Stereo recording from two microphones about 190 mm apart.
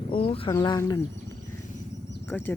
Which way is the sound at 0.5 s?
20° left (ahead or behind).